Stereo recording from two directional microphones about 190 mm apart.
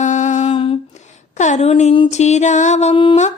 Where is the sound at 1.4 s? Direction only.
40° left (ahead or behind).